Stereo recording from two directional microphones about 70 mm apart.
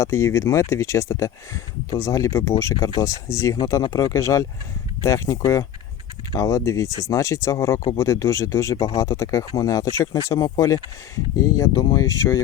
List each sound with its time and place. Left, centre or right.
0.0 s speech: left